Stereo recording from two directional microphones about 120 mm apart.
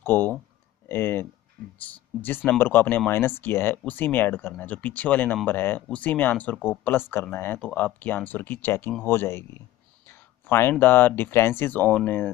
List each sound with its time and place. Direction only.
0.0 s speech: 15° left (ahead or behind)